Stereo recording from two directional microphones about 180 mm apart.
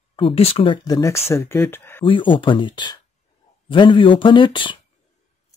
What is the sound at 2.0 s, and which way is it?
Speech, 25° left (ahead or behind).